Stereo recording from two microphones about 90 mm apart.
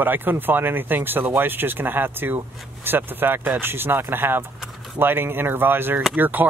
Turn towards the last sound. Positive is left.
turn(degrees=-20)  # may be behind; listen again after turning